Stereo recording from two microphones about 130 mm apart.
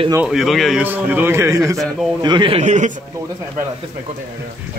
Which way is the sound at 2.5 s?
70° right (ahead or behind).